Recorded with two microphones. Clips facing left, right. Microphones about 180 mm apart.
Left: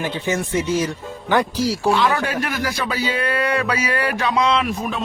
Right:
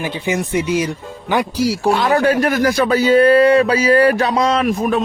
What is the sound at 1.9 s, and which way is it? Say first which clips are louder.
A man's voice: right 6 dB; 40° right (ahead or behind).